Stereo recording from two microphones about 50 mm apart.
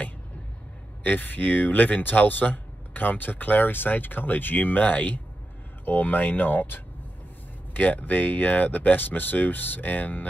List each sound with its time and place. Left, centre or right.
1.0 s speech: left